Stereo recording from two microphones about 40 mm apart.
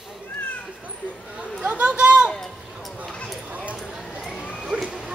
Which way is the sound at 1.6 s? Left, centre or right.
Right.